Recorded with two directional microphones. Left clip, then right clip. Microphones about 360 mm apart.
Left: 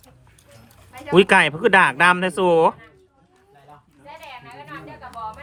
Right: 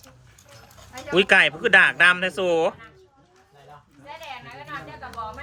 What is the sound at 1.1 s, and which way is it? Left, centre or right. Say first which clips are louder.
Speech: left 2 dB; centre.